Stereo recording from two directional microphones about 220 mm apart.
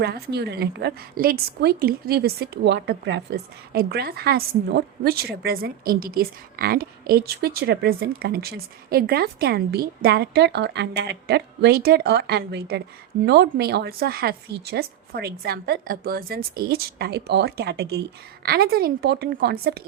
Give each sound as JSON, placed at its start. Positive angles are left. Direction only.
{"t": 0.0, "sound": "a woman's voice", "side_deg": -50}